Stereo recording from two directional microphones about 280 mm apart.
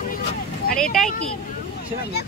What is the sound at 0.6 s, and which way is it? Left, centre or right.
Speech, left.